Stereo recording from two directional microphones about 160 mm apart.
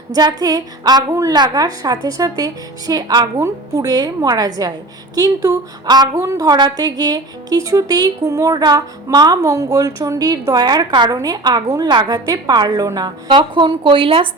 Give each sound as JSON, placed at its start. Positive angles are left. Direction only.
{"t": 0.1, "sound": "a woman's voice", "side_deg": -25}